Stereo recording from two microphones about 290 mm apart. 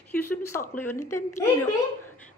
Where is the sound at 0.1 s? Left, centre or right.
Centre.